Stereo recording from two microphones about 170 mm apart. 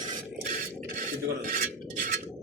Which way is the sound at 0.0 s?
50° right (ahead or behind).